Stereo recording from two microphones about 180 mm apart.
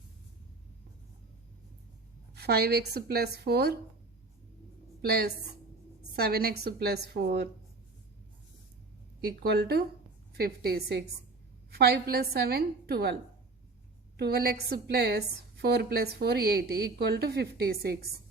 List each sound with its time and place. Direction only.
2.3 s a woman's voice: 65° right (ahead or behind)
6.1 s a woman's voice: 60° right (ahead or behind)
9.3 s a woman's voice: 60° right (ahead or behind)
14.2 s a woman's voice: 60° right (ahead or behind)